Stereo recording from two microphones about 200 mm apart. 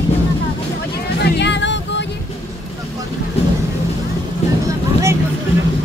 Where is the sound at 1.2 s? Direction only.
60° left (ahead or behind).